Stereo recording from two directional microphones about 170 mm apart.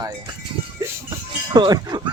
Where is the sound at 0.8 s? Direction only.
20° right (ahead or behind).